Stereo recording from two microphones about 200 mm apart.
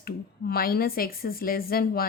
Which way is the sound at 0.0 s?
50° left (ahead or behind).